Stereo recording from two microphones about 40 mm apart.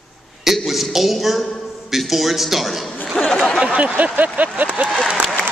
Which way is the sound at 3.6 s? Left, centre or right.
Right.